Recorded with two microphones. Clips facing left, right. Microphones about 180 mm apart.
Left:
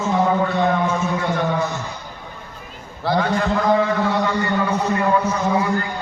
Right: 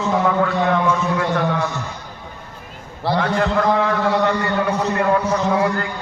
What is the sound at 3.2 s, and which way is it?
A man's voice, 65° right (ahead or behind).